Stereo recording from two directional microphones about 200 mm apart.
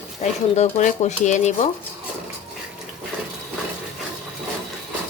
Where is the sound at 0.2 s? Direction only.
35° left (ahead or behind).